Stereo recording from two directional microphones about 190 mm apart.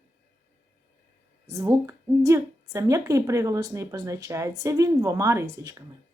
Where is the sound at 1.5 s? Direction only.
15° right (ahead or behind).